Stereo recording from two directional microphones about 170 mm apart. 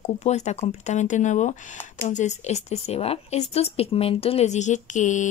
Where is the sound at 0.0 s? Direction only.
40° left (ahead or behind).